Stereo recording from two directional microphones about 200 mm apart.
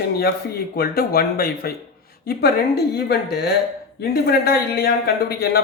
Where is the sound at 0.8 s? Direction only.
50° left (ahead or behind).